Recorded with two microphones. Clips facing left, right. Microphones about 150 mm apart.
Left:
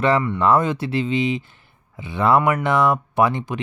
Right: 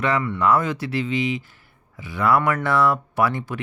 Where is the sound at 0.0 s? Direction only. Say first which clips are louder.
Left 3 dB; 30° left (ahead or behind).